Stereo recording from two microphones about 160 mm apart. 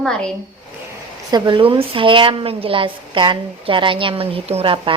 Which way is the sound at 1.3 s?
30° right (ahead or behind).